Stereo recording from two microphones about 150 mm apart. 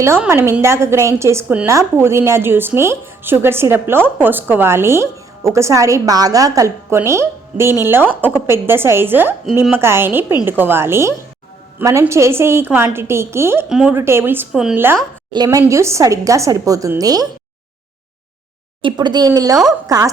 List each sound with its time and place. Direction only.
0.2 s a woman's voice: 15° right (ahead or behind)
13.7 s speech: 5° right (ahead or behind)
13.9 s a woman's voice: 15° right (ahead or behind)
15.4 s a woman's voice: 15° right (ahead or behind)
18.8 s a woman's voice: 30° right (ahead or behind)